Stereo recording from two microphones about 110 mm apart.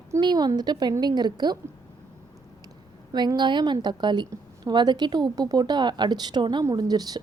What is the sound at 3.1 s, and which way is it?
A woman's voice, 40° right (ahead or behind).